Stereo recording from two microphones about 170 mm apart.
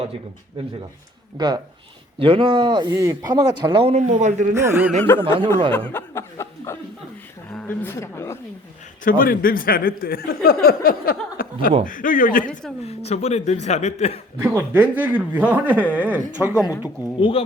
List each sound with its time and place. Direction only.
1.4 s a man's voice: 25° right (ahead or behind); by 4.5 s 45° right (ahead or behind)
4.5 s speech: 15° right (ahead or behind)
5.1 s speech: 10° left (ahead or behind)
9.0 s speech: 55° left (ahead or behind)
12.8 s speech: 40° left (ahead or behind)
14.5 s speech: 15° right (ahead or behind)
16.6 s speech: 15° left (ahead or behind)
17.2 s speech: 30° left (ahead or behind)